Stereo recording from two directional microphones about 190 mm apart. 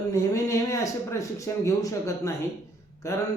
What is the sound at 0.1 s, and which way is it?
A man's voice, 15° left (ahead or behind).